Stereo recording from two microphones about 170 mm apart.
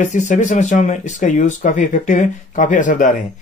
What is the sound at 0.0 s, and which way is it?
Speech, 45° left (ahead or behind).